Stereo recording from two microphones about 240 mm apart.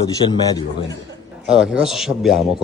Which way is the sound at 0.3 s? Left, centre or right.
Centre.